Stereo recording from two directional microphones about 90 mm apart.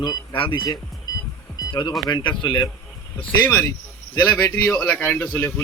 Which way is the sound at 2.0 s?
60° left (ahead or behind).